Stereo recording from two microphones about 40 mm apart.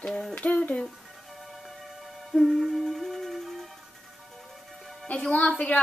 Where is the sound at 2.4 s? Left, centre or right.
Centre.